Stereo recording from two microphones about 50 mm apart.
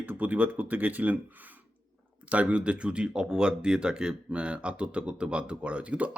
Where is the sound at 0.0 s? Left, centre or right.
Right.